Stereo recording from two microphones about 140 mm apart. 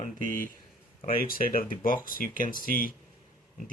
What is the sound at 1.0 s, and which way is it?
Speech, 90° left.